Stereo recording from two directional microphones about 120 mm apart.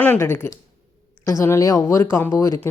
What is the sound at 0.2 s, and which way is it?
Speech, 20° left (ahead or behind).